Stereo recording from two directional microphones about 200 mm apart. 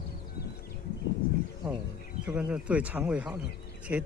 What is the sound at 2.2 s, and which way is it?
Speech, 5° right (ahead or behind).